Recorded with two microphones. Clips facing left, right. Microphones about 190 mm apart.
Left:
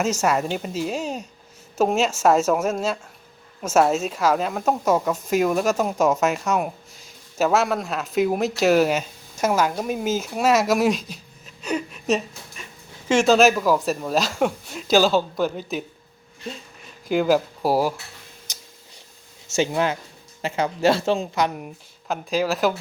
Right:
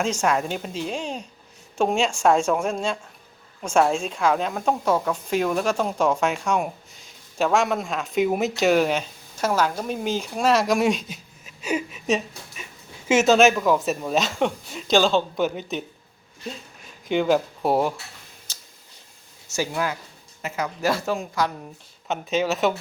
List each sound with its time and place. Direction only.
0.0 s a woman's voice: 5° left (ahead or behind)
18.5 s a sound: 15° left (ahead or behind)
19.5 s speech: 25° left (ahead or behind)
22.0 s a woman's voice: centre (ahead or behind)